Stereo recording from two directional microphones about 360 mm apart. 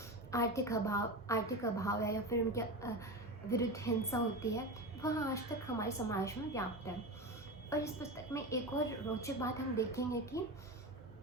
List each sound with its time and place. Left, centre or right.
0.3 s a woman's voice: centre